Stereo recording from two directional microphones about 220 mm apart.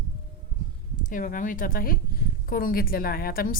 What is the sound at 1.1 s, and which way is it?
A woman's voice, 40° left (ahead or behind).